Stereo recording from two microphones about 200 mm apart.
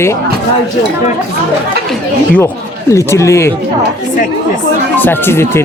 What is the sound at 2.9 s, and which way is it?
Speech, 15° left (ahead or behind).